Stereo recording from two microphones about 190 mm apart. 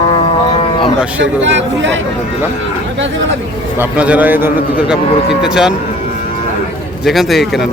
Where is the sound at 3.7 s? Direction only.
5° right (ahead or behind).